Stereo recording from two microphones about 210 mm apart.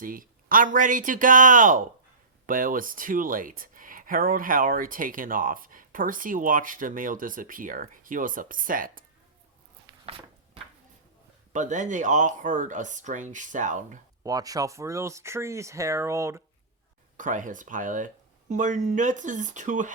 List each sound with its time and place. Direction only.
0.0 s speech: 40° right (ahead or behind)
10.1 s a sound: 25° right (ahead or behind)
11.5 s speech: 35° right (ahead or behind)
14.3 s speech: 15° right (ahead or behind)
17.2 s speech: 40° right (ahead or behind)